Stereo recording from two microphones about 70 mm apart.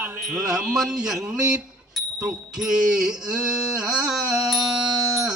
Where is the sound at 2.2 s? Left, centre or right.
Centre.